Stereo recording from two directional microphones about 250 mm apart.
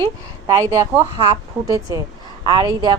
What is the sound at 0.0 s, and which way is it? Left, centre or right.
A woman's voice, centre.